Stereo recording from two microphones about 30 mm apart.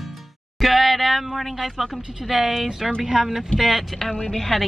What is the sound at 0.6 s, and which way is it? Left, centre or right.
Speech, centre.